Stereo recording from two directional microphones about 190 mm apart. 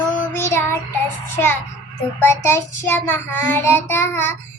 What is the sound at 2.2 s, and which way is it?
Child singing, 10° left (ahead or behind).